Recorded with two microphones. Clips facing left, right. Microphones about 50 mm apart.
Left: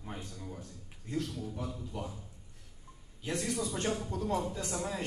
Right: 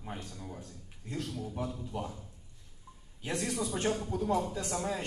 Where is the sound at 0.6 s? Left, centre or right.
Right.